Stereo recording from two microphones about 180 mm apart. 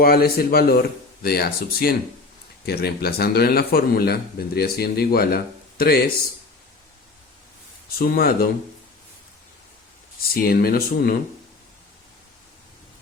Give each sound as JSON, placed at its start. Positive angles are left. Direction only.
{"t": 0.0, "sound": "a man's voice", "side_deg": 55}
{"t": 7.9, "sound": "a man's voice", "side_deg": 55}
{"t": 10.3, "sound": "a man's voice", "side_deg": 55}